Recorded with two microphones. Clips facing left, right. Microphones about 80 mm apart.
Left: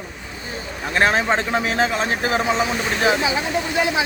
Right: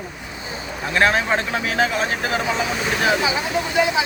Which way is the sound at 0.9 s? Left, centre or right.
Left.